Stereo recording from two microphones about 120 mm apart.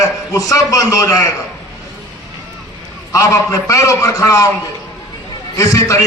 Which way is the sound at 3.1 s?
25° left (ahead or behind).